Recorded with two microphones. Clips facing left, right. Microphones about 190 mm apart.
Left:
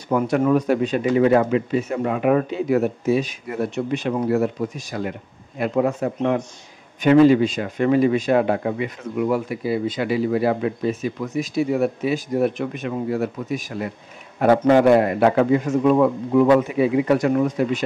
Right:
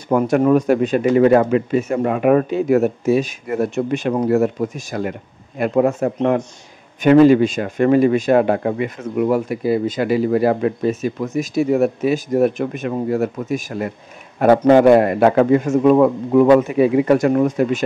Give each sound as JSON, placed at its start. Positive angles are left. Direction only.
{"t": 0.1, "sound": "speech", "side_deg": -50}